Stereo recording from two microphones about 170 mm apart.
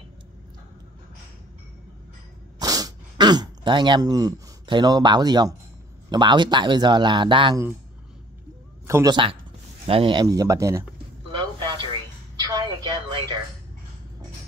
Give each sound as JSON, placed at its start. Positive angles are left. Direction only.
{"t": 2.6, "sound": "speech", "side_deg": -20}
{"t": 8.8, "sound": "speech", "side_deg": -15}
{"t": 9.1, "sound": "speech", "side_deg": -30}
{"t": 11.3, "sound": "a sound", "side_deg": -30}